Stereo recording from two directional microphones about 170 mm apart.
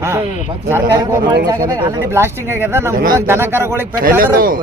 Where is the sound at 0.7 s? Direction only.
20° right (ahead or behind).